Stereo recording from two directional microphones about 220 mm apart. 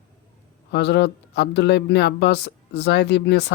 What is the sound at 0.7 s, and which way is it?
Speech, 50° left (ahead or behind).